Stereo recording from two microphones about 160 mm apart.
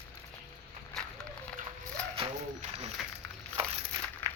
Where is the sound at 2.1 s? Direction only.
40° right (ahead or behind).